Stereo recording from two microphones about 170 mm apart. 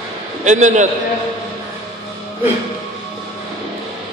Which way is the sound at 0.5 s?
45° right (ahead or behind).